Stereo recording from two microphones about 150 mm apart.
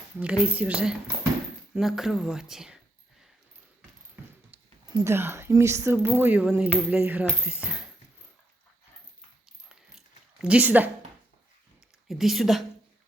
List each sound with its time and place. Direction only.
0.2 s speech: 10° right (ahead or behind)
5.0 s speech: 15° right (ahead or behind)
10.4 s speech: 10° right (ahead or behind)
12.0 s speech: centre (ahead or behind)